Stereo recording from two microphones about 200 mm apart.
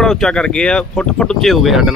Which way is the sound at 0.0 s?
Centre (ahead or behind).